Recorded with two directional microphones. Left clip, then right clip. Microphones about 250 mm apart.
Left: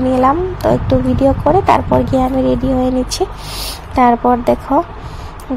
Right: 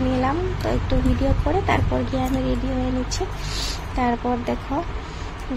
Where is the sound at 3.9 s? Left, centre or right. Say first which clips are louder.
Left 13 dB; left.